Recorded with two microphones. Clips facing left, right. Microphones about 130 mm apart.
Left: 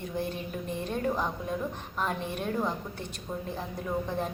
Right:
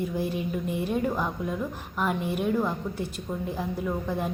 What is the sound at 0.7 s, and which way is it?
A woman's voice, 10° right (ahead or behind).